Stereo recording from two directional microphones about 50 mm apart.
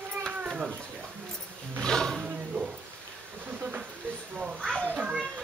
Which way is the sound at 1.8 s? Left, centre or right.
Centre.